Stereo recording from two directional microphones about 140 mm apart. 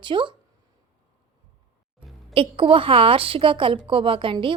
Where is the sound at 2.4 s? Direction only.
40° right (ahead or behind).